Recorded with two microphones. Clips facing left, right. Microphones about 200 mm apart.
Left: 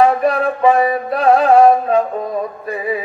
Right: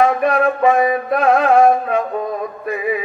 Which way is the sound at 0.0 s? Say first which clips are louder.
Left 1 dB; 35° left (ahead or behind).